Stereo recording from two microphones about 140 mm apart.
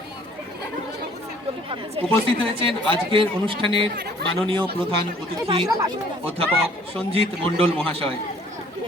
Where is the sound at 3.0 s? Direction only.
40° right (ahead or behind).